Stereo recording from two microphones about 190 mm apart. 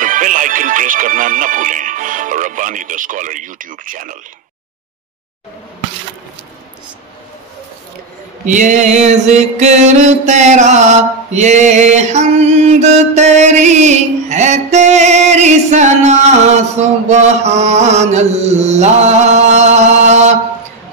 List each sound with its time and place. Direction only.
0.0 s music: 45° right (ahead or behind)
8.5 s mantra: 40° right (ahead or behind)